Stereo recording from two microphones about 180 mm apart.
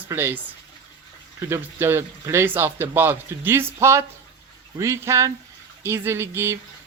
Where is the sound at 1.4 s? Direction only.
15° right (ahead or behind).